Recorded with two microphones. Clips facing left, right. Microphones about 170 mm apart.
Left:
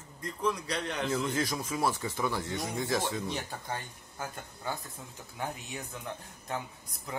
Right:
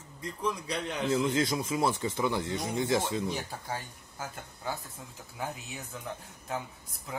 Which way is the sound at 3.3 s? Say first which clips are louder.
Right 1 dB; 5° right (ahead or behind).